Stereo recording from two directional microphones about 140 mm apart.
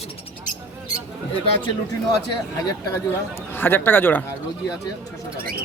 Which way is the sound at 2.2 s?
25° left (ahead or behind).